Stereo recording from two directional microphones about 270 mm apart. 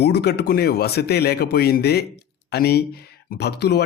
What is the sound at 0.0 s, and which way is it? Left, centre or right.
Speech, left.